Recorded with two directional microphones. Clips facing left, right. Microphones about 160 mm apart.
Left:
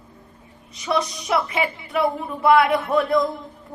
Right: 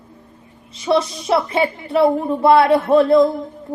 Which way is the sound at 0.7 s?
25° right (ahead or behind).